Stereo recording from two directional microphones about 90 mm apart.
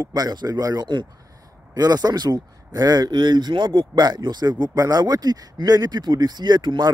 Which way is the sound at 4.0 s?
50° right (ahead or behind).